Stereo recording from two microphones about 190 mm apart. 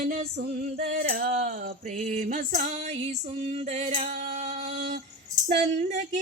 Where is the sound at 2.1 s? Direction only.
40° right (ahead or behind).